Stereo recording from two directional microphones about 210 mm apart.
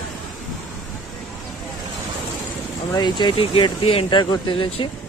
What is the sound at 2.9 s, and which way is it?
Speech, 20° left (ahead or behind).